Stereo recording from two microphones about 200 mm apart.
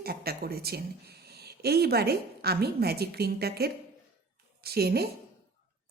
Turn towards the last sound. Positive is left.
turn(degrees=-50)  # may be behind; listen again after turning